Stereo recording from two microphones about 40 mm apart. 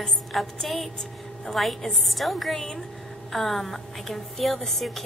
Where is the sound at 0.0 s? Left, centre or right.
Centre.